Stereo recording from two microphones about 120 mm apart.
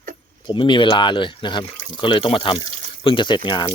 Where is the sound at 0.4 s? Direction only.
45° left (ahead or behind).